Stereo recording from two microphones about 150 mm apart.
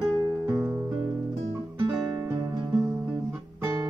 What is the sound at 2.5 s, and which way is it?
Music, 30° right (ahead or behind).